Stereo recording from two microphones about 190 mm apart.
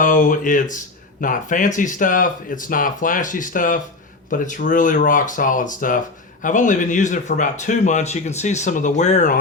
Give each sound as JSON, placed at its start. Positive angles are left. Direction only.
{"t": 0.0, "sound": "speech", "side_deg": 45}